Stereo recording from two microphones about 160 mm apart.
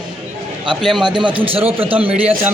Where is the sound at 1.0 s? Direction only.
30° right (ahead or behind).